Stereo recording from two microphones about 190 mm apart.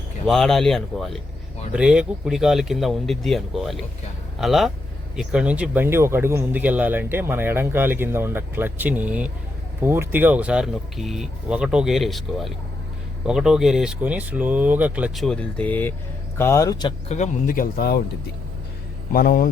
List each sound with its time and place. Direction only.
0.3 s speech: centre (ahead or behind); by 16.9 s 15° left (ahead or behind)
17.1 s speech: 40° left (ahead or behind)
19.1 s speech: 50° left (ahead or behind)